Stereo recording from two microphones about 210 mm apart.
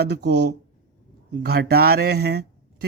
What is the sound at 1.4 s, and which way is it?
Speech, 50° right (ahead or behind).